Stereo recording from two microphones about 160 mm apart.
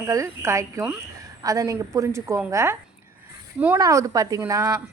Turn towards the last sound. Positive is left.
turn(degrees=-20)  # may be behind; listen again after turning